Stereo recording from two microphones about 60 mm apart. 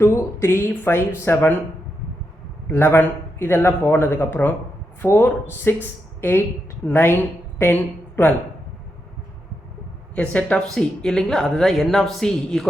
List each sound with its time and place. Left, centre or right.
0.0 s a man's voice: left
2.6 s a man's voice: left
10.2 s speech: centre
10.8 s a woman's voice: centre